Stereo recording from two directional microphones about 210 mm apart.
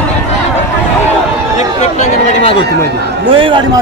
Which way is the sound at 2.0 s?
30° left (ahead or behind).